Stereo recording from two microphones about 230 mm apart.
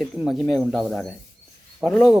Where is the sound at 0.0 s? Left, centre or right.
Centre.